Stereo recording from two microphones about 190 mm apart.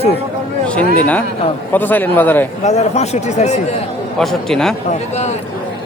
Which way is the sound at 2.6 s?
35° left (ahead or behind).